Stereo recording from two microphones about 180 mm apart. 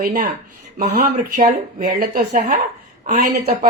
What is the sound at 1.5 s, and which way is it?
Speech, 60° right (ahead or behind).